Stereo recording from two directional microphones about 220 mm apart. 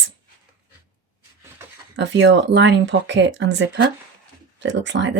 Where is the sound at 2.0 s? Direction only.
55° right (ahead or behind).